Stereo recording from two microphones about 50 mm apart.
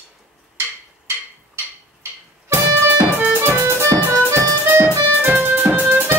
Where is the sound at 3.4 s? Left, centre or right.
Right.